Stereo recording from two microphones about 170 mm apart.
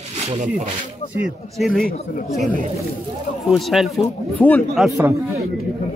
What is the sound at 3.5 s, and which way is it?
A man's voice, centre (ahead or behind).